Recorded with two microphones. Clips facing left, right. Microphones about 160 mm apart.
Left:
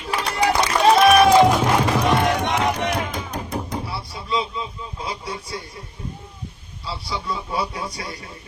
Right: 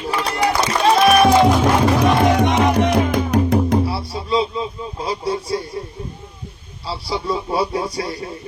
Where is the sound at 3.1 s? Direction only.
75° right (ahead or behind).